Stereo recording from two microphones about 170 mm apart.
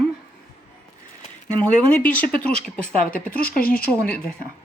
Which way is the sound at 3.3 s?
60° left (ahead or behind).